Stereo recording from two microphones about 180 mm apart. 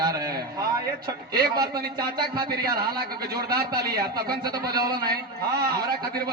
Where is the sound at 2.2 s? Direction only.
25° right (ahead or behind).